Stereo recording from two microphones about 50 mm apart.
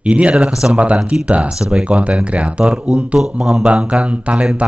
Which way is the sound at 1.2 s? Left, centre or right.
Right.